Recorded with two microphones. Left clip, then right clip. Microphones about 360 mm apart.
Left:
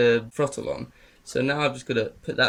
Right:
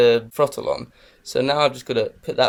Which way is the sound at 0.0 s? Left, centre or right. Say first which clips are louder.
Right 5 dB; right.